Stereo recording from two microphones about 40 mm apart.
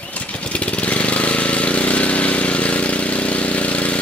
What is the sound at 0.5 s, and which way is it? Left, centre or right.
Vehicle, left.